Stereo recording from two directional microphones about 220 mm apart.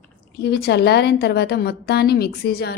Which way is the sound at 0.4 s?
50° left (ahead or behind).